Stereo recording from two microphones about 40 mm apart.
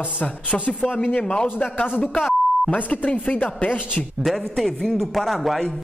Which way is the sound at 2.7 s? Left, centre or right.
Left.